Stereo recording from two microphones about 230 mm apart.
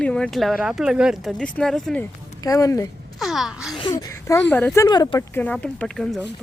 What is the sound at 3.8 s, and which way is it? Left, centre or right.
Speech, centre.